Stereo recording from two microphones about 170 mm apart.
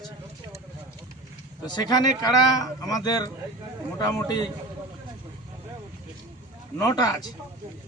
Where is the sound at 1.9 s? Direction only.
20° left (ahead or behind).